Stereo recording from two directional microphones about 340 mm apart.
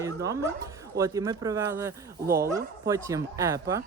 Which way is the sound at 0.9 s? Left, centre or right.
Centre.